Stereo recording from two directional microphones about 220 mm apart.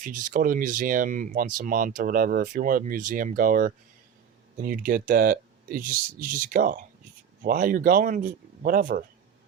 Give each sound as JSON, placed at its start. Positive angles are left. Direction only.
{"t": 0.0, "sound": "speech", "side_deg": -40}